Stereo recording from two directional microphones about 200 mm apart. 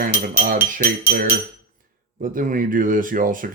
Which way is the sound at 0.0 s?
40° right (ahead or behind).